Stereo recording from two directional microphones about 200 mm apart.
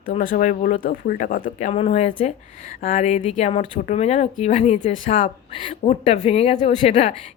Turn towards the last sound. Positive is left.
turn(degrees=30)  # may be behind; listen again after turning